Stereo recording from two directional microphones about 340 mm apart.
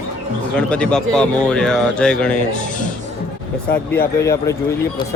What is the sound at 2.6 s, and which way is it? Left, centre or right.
Music, left.